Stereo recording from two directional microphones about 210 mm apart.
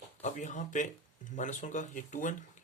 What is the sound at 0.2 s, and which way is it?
Speech, 35° left (ahead or behind).